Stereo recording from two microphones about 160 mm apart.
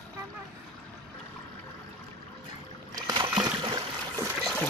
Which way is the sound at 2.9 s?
25° right (ahead or behind).